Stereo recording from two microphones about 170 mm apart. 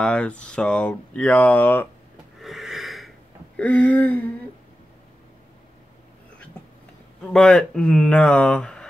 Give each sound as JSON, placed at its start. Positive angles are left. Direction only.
{"t": 0.0, "sound": "speech", "side_deg": 5}
{"t": 2.4, "sound": "a sound", "side_deg": 0}
{"t": 3.5, "sound": "speech", "side_deg": 10}
{"t": 7.3, "sound": "speech", "side_deg": 5}